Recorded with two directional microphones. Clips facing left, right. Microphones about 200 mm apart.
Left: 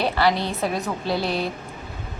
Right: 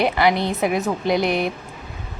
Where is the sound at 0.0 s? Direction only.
15° right (ahead or behind).